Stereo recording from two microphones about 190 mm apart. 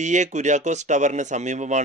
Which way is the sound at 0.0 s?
40° right (ahead or behind).